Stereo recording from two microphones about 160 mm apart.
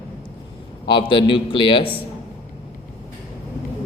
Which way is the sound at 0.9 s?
30° left (ahead or behind).